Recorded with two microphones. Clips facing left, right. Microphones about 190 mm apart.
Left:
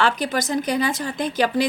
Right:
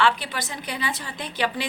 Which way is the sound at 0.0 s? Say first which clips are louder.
Left 2 dB; 45° left (ahead or behind).